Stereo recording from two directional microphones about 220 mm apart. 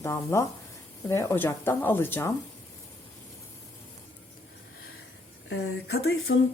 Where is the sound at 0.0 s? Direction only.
10° left (ahead or behind).